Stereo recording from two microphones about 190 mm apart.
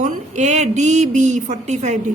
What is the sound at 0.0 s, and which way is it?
A woman's voice, 40° right (ahead or behind).